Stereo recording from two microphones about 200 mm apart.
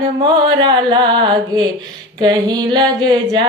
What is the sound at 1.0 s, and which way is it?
Music, 25° right (ahead or behind).